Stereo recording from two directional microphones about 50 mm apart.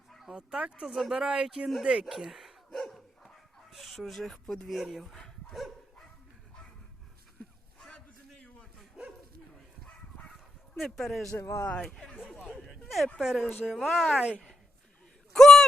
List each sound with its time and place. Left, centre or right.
0.3 s speech: centre
0.9 s speech: centre
1.2 s speech: centre
2.3 s dog: centre
4.7 s speech: centre
5.1 s dog: centre
10.8 s speech: centre
11.3 s speech: left
11.7 s speech: centre
12.7 s a sound: centre
13.1 s speech: centre
15.3 s a sound: centre